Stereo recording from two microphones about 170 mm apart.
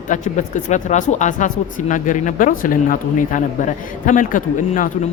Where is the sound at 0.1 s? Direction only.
45° left (ahead or behind).